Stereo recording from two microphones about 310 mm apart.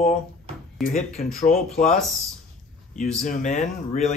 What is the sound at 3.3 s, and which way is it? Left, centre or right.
Speech, left.